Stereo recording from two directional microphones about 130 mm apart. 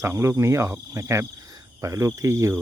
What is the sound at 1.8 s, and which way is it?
Speech, 25° right (ahead or behind).